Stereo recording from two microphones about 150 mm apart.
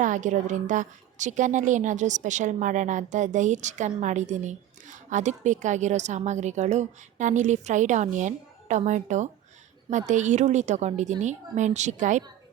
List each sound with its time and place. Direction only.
0.0 s a woman's voice: 55° right (ahead or behind)